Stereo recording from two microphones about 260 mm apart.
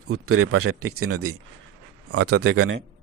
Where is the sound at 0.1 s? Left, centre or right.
Right.